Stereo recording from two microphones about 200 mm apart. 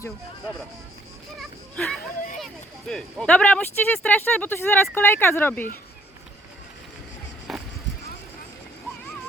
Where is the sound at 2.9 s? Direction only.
Centre (ahead or behind).